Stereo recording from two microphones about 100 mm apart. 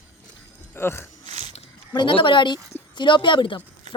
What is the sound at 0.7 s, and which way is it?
Speech, 25° left (ahead or behind).